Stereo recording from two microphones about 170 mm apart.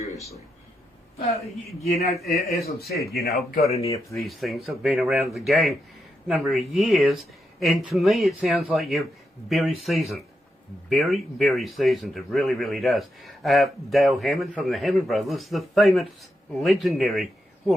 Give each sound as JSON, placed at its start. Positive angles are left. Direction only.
{"t": 2.0, "sound": "speech", "side_deg": 40}
{"t": 2.2, "sound": "speech", "side_deg": 65}
{"t": 3.8, "sound": "speech", "side_deg": 20}
{"t": 4.2, "sound": "speech", "side_deg": 0}